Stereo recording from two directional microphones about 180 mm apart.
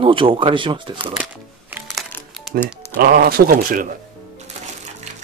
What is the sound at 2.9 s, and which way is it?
Speech, 55° right (ahead or behind).